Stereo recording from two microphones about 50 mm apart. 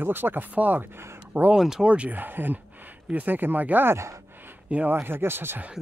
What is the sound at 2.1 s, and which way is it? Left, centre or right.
Speech, right.